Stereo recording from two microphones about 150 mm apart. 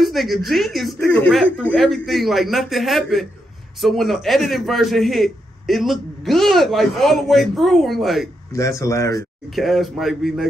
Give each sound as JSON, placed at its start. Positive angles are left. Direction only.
{"t": 0.0, "sound": "a man's voice", "side_deg": 0}
{"t": 8.5, "sound": "speech", "side_deg": 20}
{"t": 9.6, "sound": "a man's voice", "side_deg": 0}